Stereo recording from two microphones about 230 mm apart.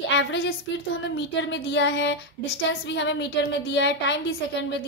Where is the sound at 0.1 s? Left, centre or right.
Left.